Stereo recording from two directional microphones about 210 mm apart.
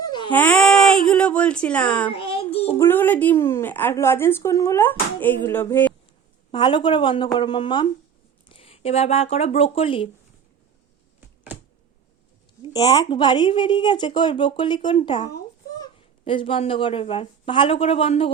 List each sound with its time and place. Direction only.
0.0 s baby cry: 20° left (ahead or behind)
0.3 s speech: 5° left (ahead or behind)
2.0 s speech: 25° left (ahead or behind)
2.7 s a woman's voice: 10° left (ahead or behind)
6.5 s speech: 20° left (ahead or behind)
12.7 s speech: 20° left (ahead or behind)